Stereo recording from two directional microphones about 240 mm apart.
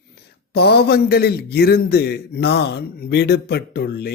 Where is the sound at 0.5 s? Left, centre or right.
Left.